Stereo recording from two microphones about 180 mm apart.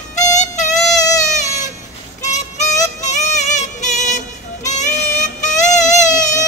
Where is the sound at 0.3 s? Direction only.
40° left (ahead or behind).